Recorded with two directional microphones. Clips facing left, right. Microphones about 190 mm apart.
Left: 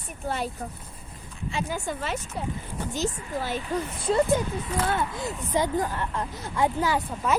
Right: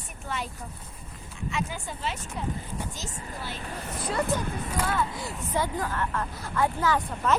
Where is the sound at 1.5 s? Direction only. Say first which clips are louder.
Left 2 dB; 30° left (ahead or behind).